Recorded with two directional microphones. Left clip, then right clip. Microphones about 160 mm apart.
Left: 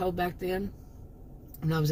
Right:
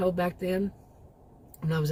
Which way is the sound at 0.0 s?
35° right (ahead or behind).